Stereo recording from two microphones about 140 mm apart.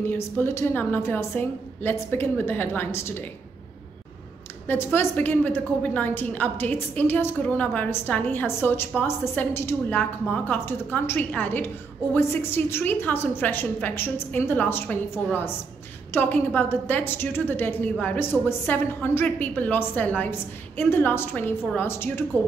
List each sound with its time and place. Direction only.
0.0 s a woman's voice: 15° left (ahead or behind)
4.6 s a woman's voice: 15° left (ahead or behind)
16.1 s a woman's voice: 15° left (ahead or behind)